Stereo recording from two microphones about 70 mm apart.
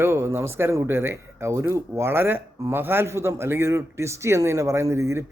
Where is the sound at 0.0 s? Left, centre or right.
Right.